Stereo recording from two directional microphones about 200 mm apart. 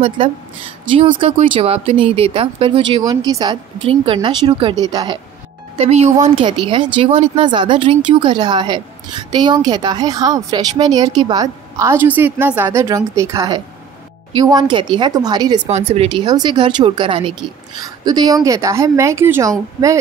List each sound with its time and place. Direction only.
0.8 s speech: 25° right (ahead or behind)
5.8 s speech: 35° right (ahead or behind)
15.7 s speech: 30° right (ahead or behind); by 19.5 s 10° right (ahead or behind)